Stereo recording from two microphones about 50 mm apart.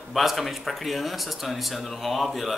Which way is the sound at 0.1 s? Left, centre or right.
Centre.